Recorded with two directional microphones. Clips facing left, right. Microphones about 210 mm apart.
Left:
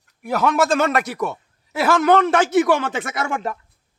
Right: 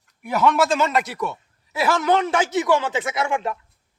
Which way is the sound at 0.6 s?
55° left (ahead or behind).